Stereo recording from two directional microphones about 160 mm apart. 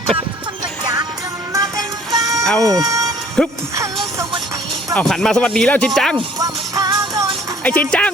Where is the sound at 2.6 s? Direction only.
20° right (ahead or behind).